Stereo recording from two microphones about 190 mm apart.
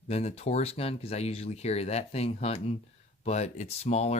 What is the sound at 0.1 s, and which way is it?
Speech, 35° left (ahead or behind).